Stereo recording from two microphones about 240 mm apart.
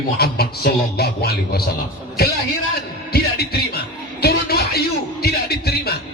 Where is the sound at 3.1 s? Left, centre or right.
Left.